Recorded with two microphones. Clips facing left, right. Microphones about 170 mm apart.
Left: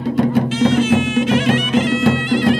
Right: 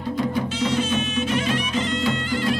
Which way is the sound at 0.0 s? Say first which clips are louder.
Left 8 dB; 70° left (ahead or behind).